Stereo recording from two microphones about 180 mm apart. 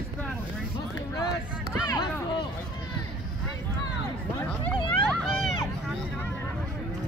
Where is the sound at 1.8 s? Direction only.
25° left (ahead or behind).